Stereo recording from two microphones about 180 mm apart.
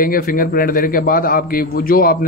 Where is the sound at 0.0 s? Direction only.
50° left (ahead or behind).